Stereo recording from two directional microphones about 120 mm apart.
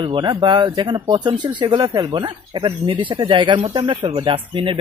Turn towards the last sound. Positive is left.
turn(degrees=-45)  # may be behind; listen again after turning